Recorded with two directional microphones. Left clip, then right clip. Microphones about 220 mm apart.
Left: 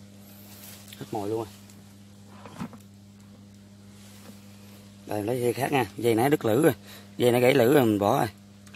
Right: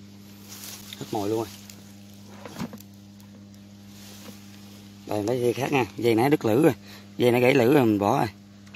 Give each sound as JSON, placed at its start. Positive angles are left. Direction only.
{"t": 1.1, "sound": "speech", "side_deg": -15}
{"t": 5.0, "sound": "speech", "side_deg": 0}